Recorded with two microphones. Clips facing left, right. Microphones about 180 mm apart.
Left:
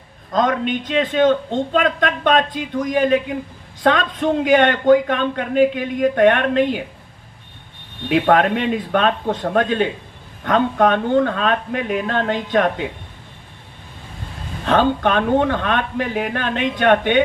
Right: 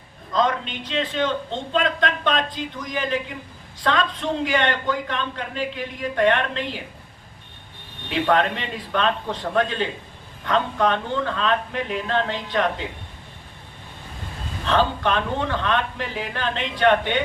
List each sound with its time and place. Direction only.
0.3 s speech: 50° left (ahead or behind)
8.1 s speech: 55° left (ahead or behind)
14.6 s speech: 50° left (ahead or behind)